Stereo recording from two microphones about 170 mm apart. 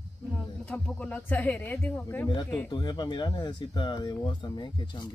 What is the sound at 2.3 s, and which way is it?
Speech, 25° left (ahead or behind).